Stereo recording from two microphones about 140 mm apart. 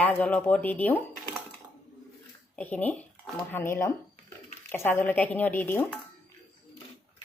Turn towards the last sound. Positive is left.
turn(degrees=15)  # may be behind; listen again after turning